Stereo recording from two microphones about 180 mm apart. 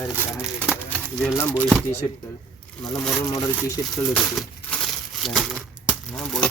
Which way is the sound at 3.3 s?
20° left (ahead or behind).